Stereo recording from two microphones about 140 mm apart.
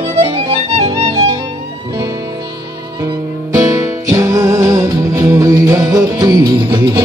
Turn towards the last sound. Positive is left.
turn(degrees=-30)  # may be behind; listen again after turning